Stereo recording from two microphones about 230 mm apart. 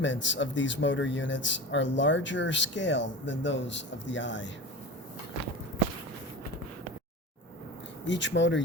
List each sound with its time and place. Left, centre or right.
0.0 s speech: left
8.0 s speech: left